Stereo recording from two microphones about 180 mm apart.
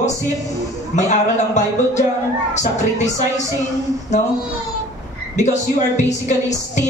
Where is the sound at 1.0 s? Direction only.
40° left (ahead or behind).